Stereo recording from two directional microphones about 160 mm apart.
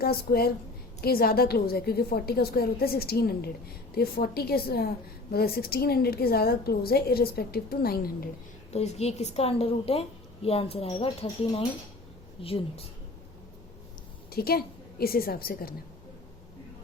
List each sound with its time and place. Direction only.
0.0 s a woman's voice: 75° left (ahead or behind)
8.7 s a woman's voice: 45° left (ahead or behind)
14.3 s a woman's voice: 75° left (ahead or behind)